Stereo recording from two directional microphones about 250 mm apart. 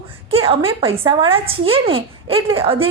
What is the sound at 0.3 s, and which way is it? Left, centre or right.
A woman's voice, right.